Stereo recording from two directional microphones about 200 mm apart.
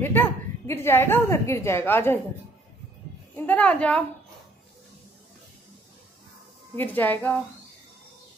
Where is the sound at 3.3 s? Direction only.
10° left (ahead or behind).